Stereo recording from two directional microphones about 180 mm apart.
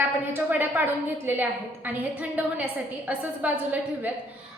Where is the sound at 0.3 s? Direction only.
10° right (ahead or behind).